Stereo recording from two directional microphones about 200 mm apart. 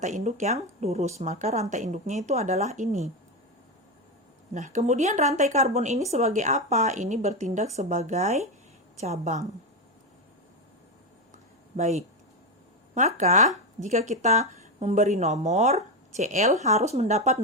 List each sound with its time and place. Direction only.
0.0 s a woman's voice: 35° right (ahead or behind)
4.5 s a woman's voice: 35° right (ahead or behind)
11.8 s a woman's voice: 35° right (ahead or behind)